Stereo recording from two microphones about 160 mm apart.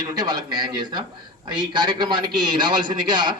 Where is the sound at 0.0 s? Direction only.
25° right (ahead or behind).